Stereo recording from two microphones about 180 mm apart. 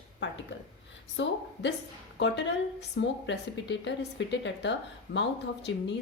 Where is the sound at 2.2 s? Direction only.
75° left (ahead or behind).